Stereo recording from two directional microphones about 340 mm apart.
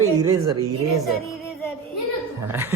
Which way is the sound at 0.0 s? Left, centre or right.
Right.